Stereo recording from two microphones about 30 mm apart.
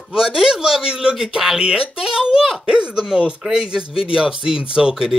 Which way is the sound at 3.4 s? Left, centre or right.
Right.